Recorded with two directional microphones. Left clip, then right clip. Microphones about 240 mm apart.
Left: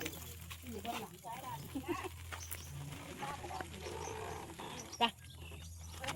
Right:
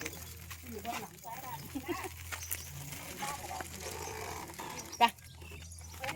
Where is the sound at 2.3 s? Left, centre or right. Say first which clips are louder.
Right 5 dB; right.